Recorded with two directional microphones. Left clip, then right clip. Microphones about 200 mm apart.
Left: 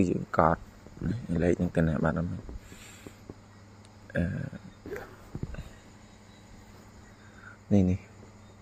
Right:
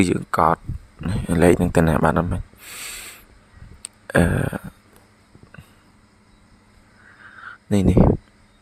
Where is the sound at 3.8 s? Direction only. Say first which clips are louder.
Right 15 dB; 55° right (ahead or behind).